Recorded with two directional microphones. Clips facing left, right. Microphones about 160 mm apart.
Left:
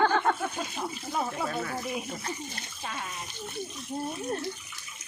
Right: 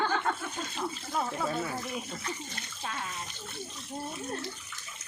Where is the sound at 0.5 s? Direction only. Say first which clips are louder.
Left 1 dB; 10° left (ahead or behind).